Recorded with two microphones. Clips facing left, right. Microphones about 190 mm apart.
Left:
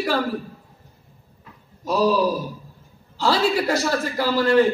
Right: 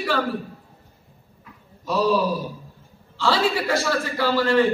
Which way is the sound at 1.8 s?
40° left (ahead or behind).